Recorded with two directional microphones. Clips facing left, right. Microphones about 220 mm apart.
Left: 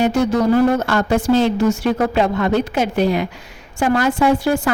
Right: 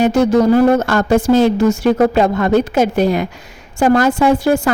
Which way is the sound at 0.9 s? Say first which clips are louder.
Right 3 dB; 45° right (ahead or behind).